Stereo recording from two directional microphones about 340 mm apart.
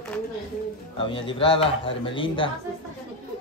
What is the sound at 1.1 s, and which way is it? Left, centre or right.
Speech, centre.